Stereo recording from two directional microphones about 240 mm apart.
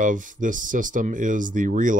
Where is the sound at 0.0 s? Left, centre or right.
Right.